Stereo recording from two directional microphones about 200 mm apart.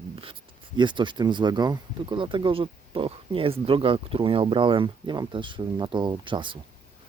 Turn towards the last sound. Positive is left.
turn(degrees=-25)  # may be behind; listen again after turning